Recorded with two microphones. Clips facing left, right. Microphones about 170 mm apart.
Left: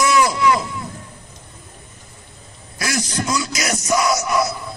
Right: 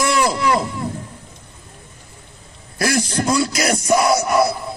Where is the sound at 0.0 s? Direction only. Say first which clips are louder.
Left 2 dB; 55° right (ahead or behind).